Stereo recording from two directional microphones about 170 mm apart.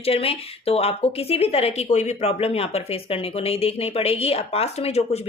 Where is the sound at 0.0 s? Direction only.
35° left (ahead or behind).